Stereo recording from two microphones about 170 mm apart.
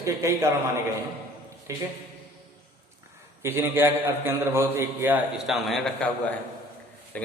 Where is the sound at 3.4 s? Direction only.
15° right (ahead or behind).